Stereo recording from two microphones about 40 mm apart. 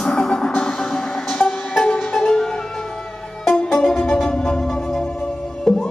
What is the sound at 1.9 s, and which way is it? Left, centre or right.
Music, centre.